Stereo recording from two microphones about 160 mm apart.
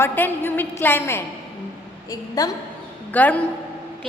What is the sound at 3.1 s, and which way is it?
Speech, 10° left (ahead or behind).